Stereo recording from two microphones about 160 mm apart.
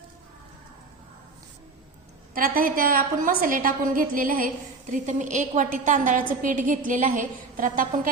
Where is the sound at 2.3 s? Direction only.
60° right (ahead or behind).